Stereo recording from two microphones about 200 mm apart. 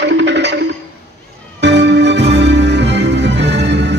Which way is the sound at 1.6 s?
60° right (ahead or behind).